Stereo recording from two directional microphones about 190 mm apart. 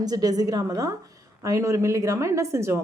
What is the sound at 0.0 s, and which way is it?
A woman's voice, 20° right (ahead or behind).